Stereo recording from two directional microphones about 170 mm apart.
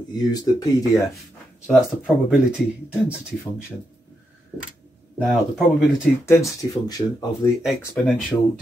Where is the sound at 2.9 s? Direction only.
5° right (ahead or behind).